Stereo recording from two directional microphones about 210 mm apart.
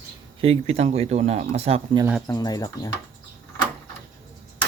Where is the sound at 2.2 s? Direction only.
15° left (ahead or behind).